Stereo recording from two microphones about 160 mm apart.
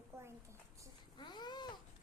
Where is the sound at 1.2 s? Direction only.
30° left (ahead or behind).